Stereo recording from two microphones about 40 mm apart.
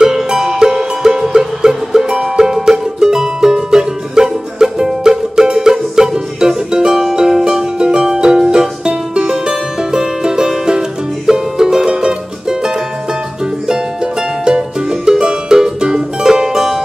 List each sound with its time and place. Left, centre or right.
0.0 s music: centre
14.4 s music: centre